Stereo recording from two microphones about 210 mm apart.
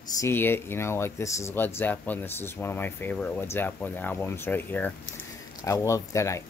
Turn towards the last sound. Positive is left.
turn(degrees=15)  # may be behind; listen again after turning